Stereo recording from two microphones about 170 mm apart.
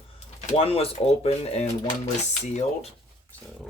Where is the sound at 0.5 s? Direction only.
35° left (ahead or behind).